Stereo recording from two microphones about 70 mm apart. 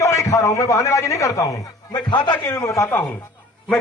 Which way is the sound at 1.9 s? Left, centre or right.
Left.